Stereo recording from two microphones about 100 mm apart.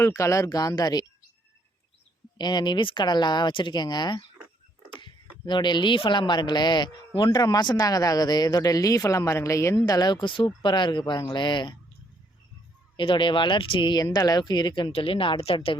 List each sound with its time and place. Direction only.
0.0 s speech: 30° left (ahead or behind)
2.4 s speech: 45° left (ahead or behind)
13.0 s speech: 55° left (ahead or behind)
15.5 s speech: 60° left (ahead or behind)